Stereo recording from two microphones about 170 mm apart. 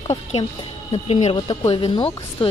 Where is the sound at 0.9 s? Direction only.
30° left (ahead or behind).